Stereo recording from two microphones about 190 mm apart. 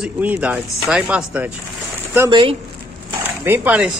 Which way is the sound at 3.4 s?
10° right (ahead or behind).